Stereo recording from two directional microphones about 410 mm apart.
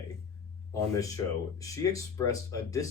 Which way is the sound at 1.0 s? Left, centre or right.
Centre.